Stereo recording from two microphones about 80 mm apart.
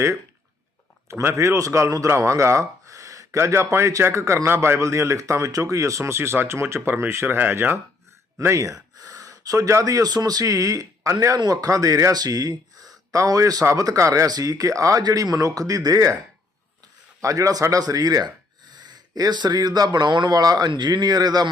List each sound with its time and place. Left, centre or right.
1.1 s a man's voice: right
8.4 s speech: right
11.3 s speech: right
17.2 s speech: right